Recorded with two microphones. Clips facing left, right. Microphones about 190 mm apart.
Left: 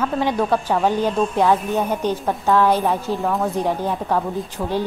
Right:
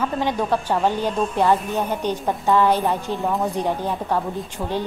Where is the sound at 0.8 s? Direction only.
10° left (ahead or behind).